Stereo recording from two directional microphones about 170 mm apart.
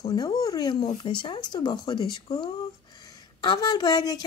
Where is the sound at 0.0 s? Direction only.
25° left (ahead or behind).